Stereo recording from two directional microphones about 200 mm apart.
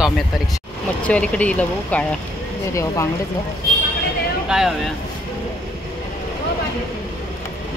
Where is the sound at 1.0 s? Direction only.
5° left (ahead or behind).